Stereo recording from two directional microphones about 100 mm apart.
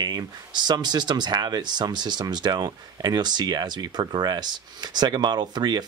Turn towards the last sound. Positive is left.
turn(degrees=-45)  # may be behind; listen again after turning